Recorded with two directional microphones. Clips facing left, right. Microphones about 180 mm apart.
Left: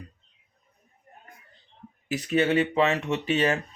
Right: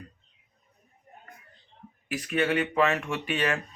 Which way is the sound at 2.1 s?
25° left (ahead or behind).